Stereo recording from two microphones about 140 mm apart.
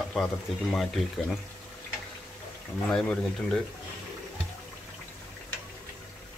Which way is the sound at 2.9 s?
5° left (ahead or behind).